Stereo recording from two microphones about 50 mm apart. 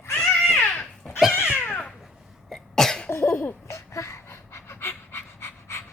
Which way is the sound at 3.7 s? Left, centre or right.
Left.